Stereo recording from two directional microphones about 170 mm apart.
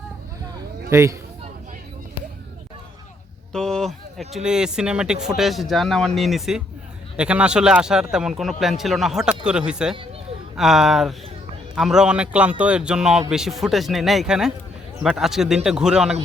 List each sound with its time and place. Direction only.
0.9 s a man's voice: 15° right (ahead or behind)
3.5 s speech: 5° left (ahead or behind)